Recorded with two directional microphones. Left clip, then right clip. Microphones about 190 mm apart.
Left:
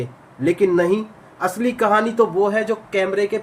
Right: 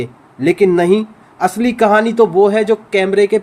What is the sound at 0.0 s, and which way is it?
Speech, 45° right (ahead or behind).